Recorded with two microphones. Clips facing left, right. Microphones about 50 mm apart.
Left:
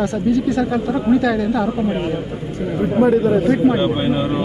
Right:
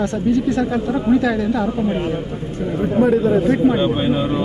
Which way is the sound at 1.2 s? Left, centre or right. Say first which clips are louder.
Left 1 dB; right.